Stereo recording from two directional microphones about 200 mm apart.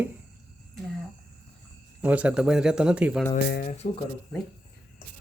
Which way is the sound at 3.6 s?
35° left (ahead or behind).